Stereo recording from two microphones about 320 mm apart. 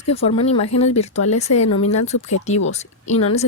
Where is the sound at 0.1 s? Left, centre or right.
Centre.